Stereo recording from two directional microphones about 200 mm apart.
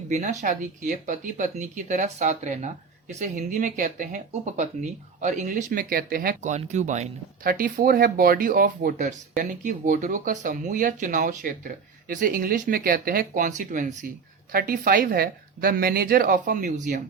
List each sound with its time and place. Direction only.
0.1 s a woman's voice: 35° right (ahead or behind)